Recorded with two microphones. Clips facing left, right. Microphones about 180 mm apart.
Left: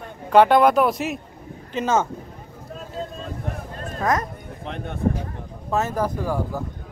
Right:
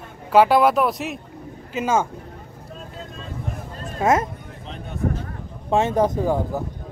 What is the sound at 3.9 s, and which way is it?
Speech, 25° right (ahead or behind).